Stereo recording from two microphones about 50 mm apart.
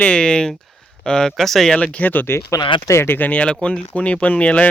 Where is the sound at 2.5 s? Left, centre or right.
Left.